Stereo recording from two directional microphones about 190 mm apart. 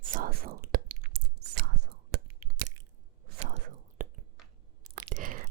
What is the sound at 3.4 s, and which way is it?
Whispering, 35° right (ahead or behind).